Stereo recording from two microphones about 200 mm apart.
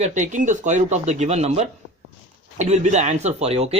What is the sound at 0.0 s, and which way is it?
Speech, 40° right (ahead or behind).